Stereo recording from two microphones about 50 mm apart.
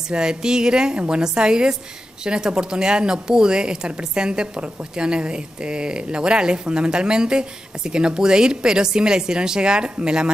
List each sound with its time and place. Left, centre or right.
0.1 s a woman's voice: centre